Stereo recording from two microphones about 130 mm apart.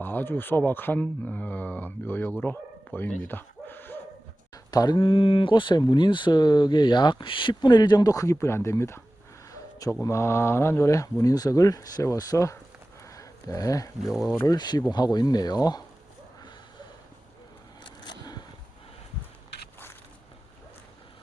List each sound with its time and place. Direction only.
0.0 s speech: 15° left (ahead or behind)
2.4 s a sound: 15° left (ahead or behind)
4.5 s speech: 30° left (ahead or behind)
9.5 s a sound: 25° left (ahead or behind)
10.0 s speech: 20° left (ahead or behind)
13.1 s a sound: 25° left (ahead or behind)
14.0 s speech: centre (ahead or behind)
14.3 s speech: 30° left (ahead or behind)
17.8 s vehicle: 35° left (ahead or behind)